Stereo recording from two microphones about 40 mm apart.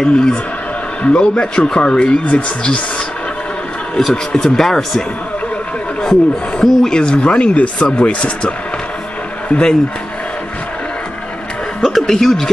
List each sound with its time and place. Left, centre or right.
0.0 s speech: centre
4.1 s speech: centre
6.6 s speech: centre
7.0 s speech: left
11.8 s speech: centre